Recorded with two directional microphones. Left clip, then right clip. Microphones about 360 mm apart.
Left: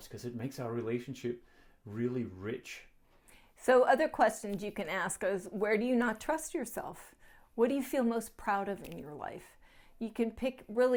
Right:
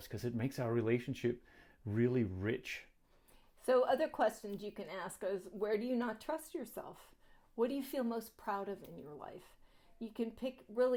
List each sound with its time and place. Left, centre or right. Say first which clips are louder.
0.1 s speech: right 1 dB; right
3.7 s a woman's voice: left 6 dB; centre
4.7 s a woman's voice: left 9 dB; left